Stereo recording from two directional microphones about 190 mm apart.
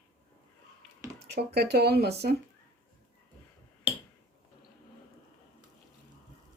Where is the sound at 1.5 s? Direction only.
60° right (ahead or behind).